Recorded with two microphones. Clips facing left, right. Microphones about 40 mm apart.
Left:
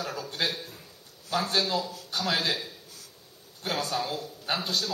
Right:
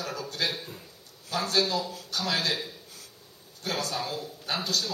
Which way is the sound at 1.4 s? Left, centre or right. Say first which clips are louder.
Right 3 dB; centre.